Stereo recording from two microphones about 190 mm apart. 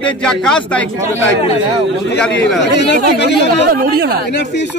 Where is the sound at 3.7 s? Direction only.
55° right (ahead or behind).